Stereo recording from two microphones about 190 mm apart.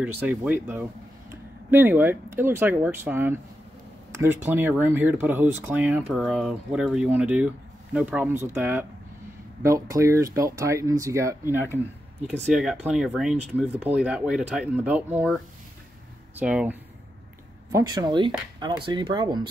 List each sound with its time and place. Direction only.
0.0 s speech: 10° right (ahead or behind)
12.5 s speech: 5° right (ahead or behind)
16.3 s speech: 5° right (ahead or behind)
17.7 s speech: 20° right (ahead or behind)